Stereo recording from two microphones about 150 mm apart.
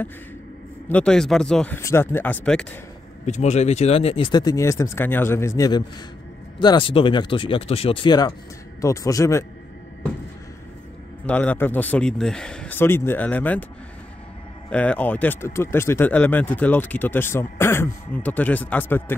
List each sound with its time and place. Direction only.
0.8 s speech: 5° left (ahead or behind)
1.8 s speech: 15° left (ahead or behind)
3.3 s speech: 50° left (ahead or behind)
4.3 s speech: 25° left (ahead or behind)
11.2 s speech: 10° left (ahead or behind)
14.7 s speech: 10° left (ahead or behind)